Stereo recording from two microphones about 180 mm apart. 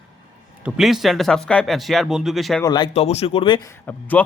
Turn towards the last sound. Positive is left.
turn(degrees=10)  # may be behind; listen again after turning